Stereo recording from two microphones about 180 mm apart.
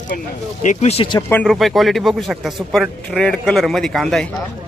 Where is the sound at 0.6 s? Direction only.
40° left (ahead or behind).